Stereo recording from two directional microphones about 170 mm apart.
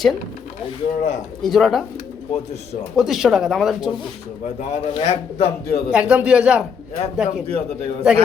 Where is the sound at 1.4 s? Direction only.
Centre (ahead or behind).